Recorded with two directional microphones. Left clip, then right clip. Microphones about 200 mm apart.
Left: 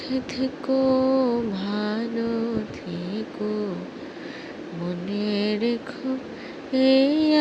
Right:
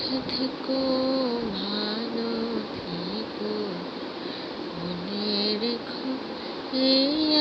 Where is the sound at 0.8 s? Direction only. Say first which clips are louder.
Left 5 dB; 65° left (ahead or behind).